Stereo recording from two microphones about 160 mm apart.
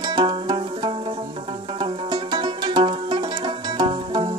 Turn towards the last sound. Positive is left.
turn(degrees=-30)  # may be behind; listen again after turning